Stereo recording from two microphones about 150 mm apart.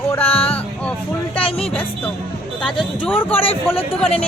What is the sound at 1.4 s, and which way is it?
Music, 40° left (ahead or behind).